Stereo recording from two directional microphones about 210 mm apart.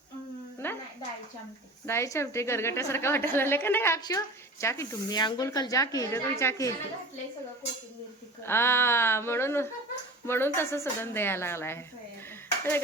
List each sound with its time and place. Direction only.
0.6 s a sound: 10° left (ahead or behind)
1.9 s a woman's voice: 10° left (ahead or behind)
8.4 s a woman's voice: 10° left (ahead or behind)